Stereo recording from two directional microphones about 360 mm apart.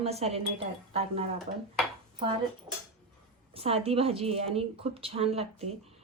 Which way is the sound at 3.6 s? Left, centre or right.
Centre.